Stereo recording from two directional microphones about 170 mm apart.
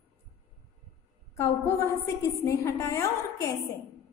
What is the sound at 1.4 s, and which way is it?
A woman's voice, 15° left (ahead or behind).